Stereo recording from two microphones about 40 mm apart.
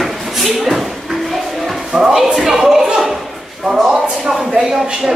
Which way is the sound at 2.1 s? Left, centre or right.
Centre.